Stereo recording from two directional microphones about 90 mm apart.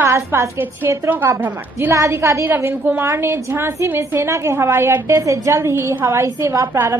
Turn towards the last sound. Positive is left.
turn(degrees=-30)  # may be behind; listen again after turning